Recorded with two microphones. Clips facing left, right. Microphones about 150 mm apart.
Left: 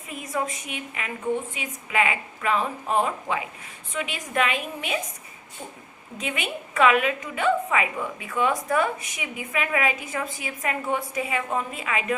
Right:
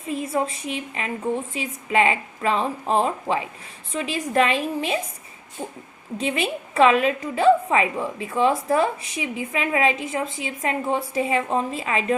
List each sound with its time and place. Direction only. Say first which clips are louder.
0.1 s a woman's voice: right 5 dB; 30° right (ahead or behind)
6.1 s a woman's voice: right 6 dB; 30° right (ahead or behind)